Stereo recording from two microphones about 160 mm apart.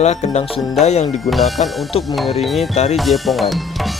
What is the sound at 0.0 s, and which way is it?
Speech, 45° left (ahead or behind).